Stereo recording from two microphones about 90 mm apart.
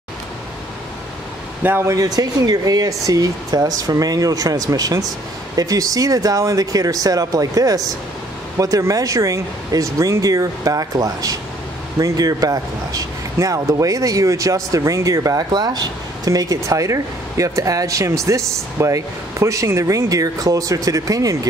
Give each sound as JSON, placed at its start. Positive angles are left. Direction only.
{"t": 1.6, "sound": "speech", "side_deg": -20}
{"t": 1.9, "sound": "speech", "side_deg": -40}
{"t": 15.5, "sound": "speech", "side_deg": -50}